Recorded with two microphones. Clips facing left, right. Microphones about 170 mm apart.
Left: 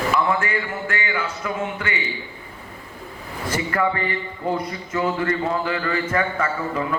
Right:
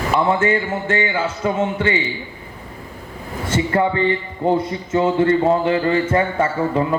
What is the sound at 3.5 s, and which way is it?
Speech, 25° right (ahead or behind).